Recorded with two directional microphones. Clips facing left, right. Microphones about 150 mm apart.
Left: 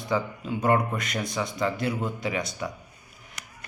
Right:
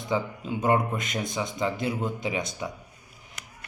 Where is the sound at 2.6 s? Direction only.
15° right (ahead or behind).